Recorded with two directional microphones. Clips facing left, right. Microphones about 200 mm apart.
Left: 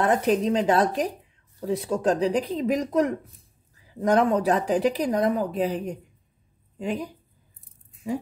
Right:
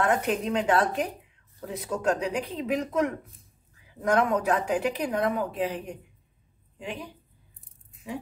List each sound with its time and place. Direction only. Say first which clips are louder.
0.1 s speech: left 4 dB; 35° left (ahead or behind)